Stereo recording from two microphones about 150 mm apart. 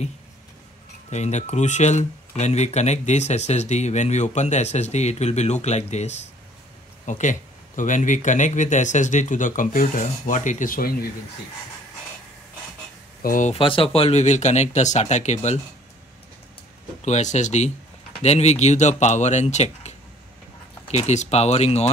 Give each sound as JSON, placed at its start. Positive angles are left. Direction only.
{"t": 1.1, "sound": "speech", "side_deg": 50}
{"t": 13.2, "sound": "speech", "side_deg": 65}
{"t": 13.5, "sound": "speech", "side_deg": 35}
{"t": 17.0, "sound": "speech", "side_deg": 50}